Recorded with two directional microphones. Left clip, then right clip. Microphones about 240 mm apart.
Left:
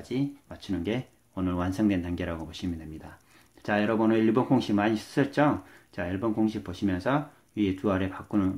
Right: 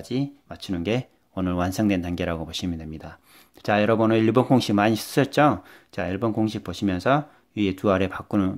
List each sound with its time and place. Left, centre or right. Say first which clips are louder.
0.1 s speech: right 2 dB; right